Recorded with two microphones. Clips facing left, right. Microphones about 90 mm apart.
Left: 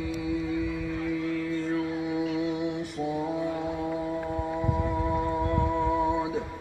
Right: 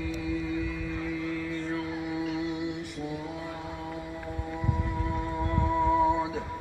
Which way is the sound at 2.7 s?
30° left (ahead or behind).